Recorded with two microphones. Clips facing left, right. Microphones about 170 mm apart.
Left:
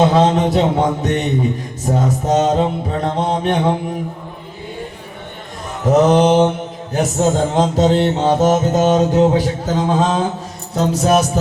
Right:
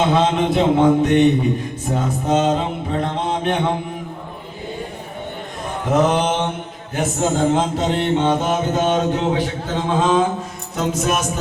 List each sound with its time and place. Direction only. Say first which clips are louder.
0.1 s mantra: left 3 dB; 40° left (ahead or behind)
5.8 s mantra: left 5 dB; 40° left (ahead or behind)